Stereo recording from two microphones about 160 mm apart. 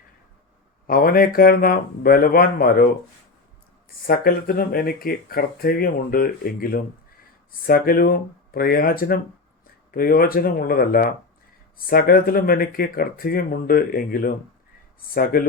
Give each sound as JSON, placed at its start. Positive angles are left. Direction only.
{"t": 0.9, "sound": "speech", "side_deg": 65}
{"t": 4.0, "sound": "speech", "side_deg": 65}